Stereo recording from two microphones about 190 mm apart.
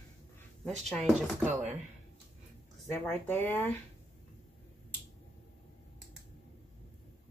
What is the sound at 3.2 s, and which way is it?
Speech, 10° left (ahead or behind).